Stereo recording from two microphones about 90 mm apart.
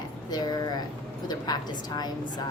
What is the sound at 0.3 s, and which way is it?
Speech, 50° left (ahead or behind).